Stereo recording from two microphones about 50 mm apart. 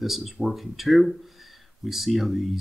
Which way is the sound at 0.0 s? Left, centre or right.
Centre.